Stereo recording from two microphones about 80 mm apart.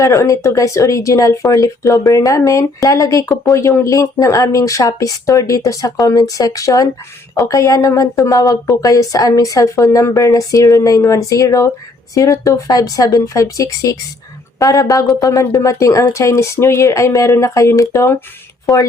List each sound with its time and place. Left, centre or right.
0.0 s speech: left